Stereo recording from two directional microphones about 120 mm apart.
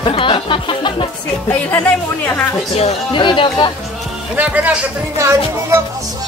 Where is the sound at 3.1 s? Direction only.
40° left (ahead or behind).